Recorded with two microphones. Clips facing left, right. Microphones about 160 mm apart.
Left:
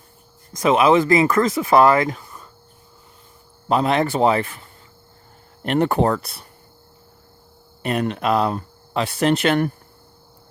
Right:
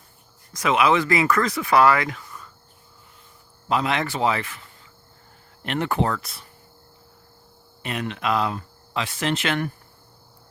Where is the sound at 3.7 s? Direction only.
35° left (ahead or behind).